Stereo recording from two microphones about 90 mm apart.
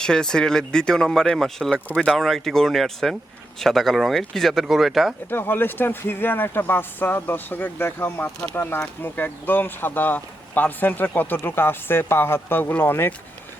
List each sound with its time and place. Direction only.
0.0 s speech: 5° left (ahead or behind)
5.3 s speech: 25° left (ahead or behind)